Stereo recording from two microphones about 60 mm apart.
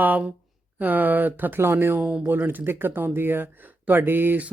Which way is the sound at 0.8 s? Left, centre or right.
Right.